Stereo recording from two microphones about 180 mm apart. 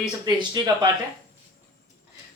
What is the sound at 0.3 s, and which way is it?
Speech, 25° right (ahead or behind).